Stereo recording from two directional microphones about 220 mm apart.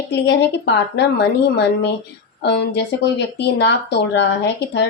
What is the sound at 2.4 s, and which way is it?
Speech, 50° left (ahead or behind).